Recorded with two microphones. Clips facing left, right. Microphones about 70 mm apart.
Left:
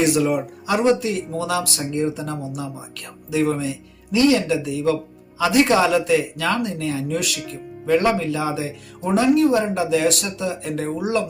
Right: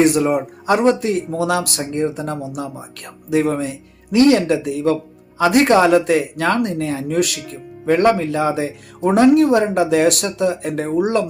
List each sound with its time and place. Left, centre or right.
0.0 s speech: right